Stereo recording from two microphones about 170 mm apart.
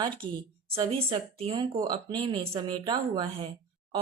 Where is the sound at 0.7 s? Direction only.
35° right (ahead or behind).